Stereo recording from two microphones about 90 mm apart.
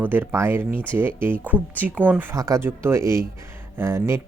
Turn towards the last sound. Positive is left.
turn(degrees=-30)  # may be behind; listen again after turning